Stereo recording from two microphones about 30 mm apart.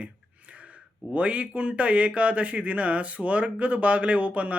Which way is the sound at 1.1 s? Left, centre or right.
Right.